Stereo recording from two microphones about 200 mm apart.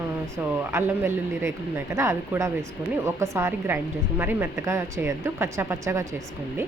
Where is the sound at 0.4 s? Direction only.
10° right (ahead or behind).